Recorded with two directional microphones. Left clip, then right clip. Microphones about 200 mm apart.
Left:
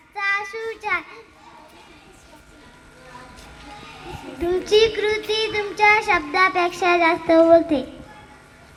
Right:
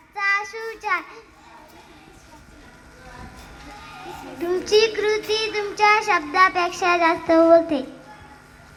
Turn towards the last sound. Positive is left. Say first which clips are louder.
# left 1 dB
turn(degrees=55)  # may be behind; listen again after turning